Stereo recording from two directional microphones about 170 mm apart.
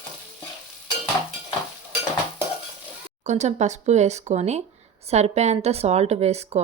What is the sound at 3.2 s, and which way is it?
A woman's voice, 45° right (ahead or behind).